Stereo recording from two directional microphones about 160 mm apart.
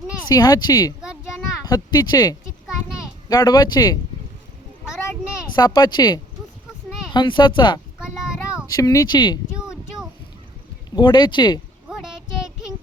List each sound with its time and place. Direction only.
0.3 s speech: 25° left (ahead or behind)
5.5 s speech: 25° left (ahead or behind)
7.9 s a sound: 5° right (ahead or behind)
8.6 s speech: 20° left (ahead or behind)
10.9 s speech: 30° left (ahead or behind)